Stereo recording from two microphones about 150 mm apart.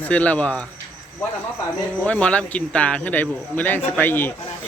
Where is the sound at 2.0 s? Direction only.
10° left (ahead or behind).